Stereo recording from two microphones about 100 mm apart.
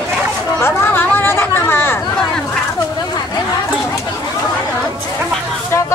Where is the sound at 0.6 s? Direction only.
20° left (ahead or behind).